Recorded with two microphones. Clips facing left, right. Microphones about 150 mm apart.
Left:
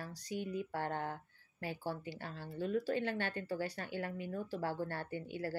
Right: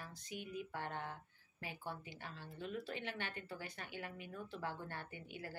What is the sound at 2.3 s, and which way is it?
Speech, 40° left (ahead or behind).